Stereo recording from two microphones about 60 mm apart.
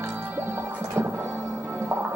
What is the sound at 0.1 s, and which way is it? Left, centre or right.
Music, right.